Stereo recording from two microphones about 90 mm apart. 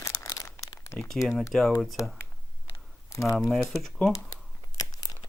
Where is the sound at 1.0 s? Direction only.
5° left (ahead or behind).